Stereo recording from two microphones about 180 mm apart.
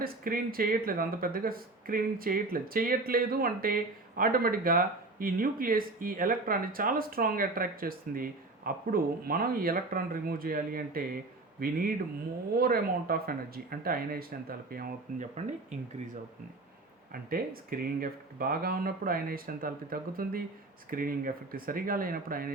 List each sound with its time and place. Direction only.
0.0 s speech: 55° right (ahead or behind)
17.1 s speech: 55° right (ahead or behind)